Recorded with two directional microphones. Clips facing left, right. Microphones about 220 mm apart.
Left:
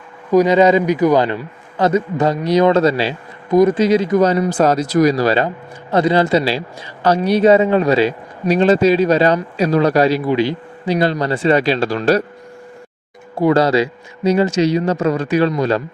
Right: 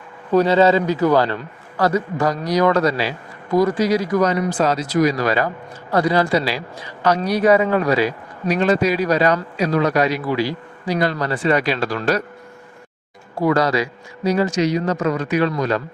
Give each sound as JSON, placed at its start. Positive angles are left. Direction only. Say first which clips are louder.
{"t": 0.3, "sound": "a man's voice", "louder": "left 3 dB", "side_deg": 15}
{"t": 4.4, "sound": "a man's voice", "louder": "left 4 dB", "side_deg": 40}
{"t": 13.4, "sound": "a man's voice", "louder": "left 4 dB", "side_deg": 30}